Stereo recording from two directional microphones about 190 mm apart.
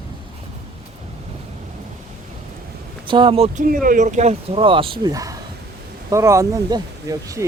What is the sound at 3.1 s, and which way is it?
Speech, 25° right (ahead or behind).